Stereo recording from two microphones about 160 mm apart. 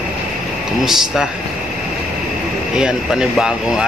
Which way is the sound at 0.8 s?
5° right (ahead or behind).